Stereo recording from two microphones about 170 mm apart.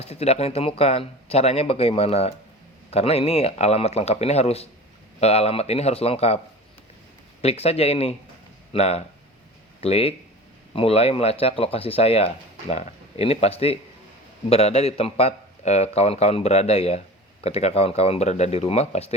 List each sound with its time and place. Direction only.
0.0 s speech: 40° left (ahead or behind)
7.4 s speech: 35° left (ahead or behind)